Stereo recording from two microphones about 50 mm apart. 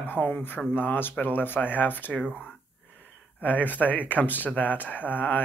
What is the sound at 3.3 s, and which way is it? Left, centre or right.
Speech, left.